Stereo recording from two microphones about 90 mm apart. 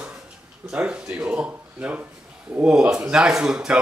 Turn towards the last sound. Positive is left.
turn(degrees=-10)  # may be behind; listen again after turning